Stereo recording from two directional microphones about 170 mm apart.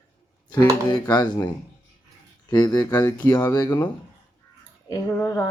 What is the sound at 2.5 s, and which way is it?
A woman's voice, 25° left (ahead or behind).